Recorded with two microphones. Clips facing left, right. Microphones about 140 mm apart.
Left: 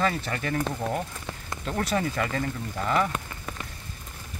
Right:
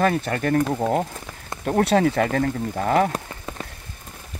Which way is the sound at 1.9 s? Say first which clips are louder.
Right 7 dB; 65° right (ahead or behind).